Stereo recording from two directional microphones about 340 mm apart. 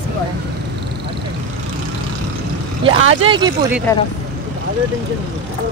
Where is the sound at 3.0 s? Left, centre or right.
Right.